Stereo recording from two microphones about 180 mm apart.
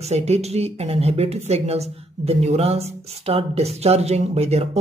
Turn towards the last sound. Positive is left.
turn(degrees=-35)  # may be behind; listen again after turning